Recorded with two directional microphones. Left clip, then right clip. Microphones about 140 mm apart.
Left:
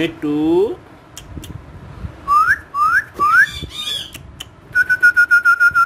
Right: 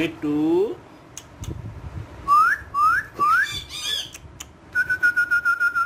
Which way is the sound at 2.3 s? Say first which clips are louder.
Left 3 dB; 40° left (ahead or behind).